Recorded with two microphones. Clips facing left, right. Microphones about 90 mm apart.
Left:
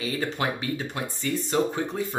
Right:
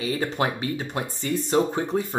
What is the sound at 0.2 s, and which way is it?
Speech, 25° right (ahead or behind).